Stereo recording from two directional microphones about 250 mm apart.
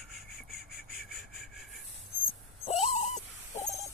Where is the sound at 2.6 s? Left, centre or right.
Left.